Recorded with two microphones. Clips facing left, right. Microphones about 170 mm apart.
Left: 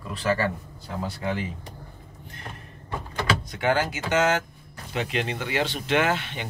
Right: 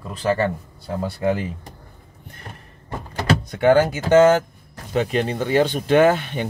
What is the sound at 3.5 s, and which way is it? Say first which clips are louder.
Speech: right 11 dB; 50° right (ahead or behind).